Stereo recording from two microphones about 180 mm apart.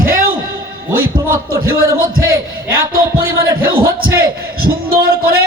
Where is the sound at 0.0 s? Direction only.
50° right (ahead or behind).